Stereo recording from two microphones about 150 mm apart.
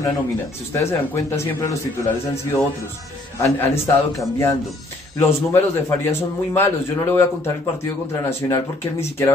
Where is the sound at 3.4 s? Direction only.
15° left (ahead or behind).